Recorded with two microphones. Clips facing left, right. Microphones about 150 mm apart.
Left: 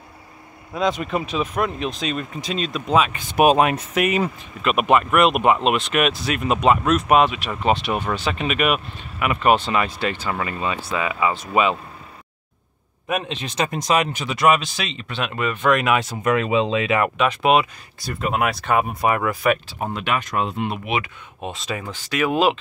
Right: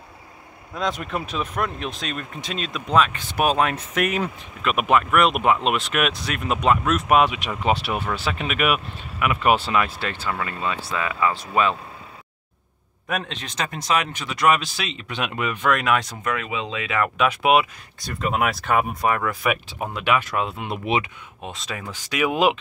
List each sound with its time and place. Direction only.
0.7 s speech: centre (ahead or behind)
7.2 s speech: 15° right (ahead or behind)
10.1 s speech: 20° left (ahead or behind)
13.1 s speech: 5° left (ahead or behind)
14.1 s speech: 5° left (ahead or behind); by 15.6 s 10° right (ahead or behind)
15.6 s speech: 5° left (ahead or behind)
16.3 s speech: 30° left (ahead or behind)
17.2 s speech: 10° right (ahead or behind)
18.0 s speech: centre (ahead or behind)
20.8 s speech: 30° right (ahead or behind)
21.4 s speech: 5° left (ahead or behind)
21.9 s speech: 10° right (ahead or behind)